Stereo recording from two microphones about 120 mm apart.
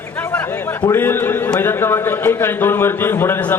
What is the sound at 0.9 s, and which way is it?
A man's voice, 20° left (ahead or behind).